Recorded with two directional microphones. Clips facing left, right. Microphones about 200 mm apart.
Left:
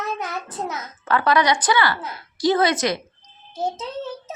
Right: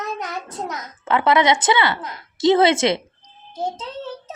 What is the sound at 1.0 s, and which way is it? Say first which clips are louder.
A woman's voice: right 2 dB; 25° right (ahead or behind).